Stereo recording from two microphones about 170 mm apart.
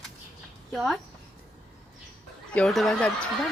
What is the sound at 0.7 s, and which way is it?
Speech, centre (ahead or behind).